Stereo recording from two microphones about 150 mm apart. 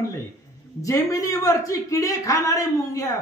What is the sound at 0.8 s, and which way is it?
Speech, 20° left (ahead or behind).